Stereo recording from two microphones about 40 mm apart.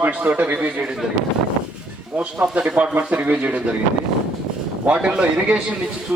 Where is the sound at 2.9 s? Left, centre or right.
Right.